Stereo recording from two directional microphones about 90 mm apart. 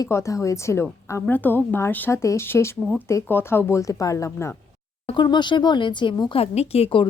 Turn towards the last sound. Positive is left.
turn(degrees=80)